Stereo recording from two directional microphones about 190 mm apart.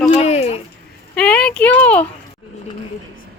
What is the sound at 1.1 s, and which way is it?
Speech, 5° left (ahead or behind).